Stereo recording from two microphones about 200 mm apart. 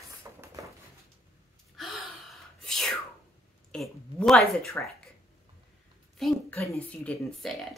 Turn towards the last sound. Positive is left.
turn(degrees=5)  # may be behind; listen again after turning